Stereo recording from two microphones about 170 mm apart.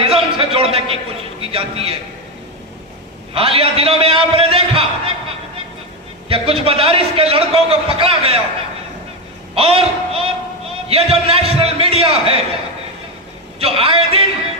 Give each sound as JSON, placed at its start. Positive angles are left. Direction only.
{"t": 0.0, "sound": "a man's voice", "side_deg": -35}
{"t": 3.3, "sound": "a man's voice", "side_deg": -35}
{"t": 6.2, "sound": "a man's voice", "side_deg": -35}
{"t": 9.6, "sound": "a man's voice", "side_deg": -35}
{"t": 13.6, "sound": "a man's voice", "side_deg": -35}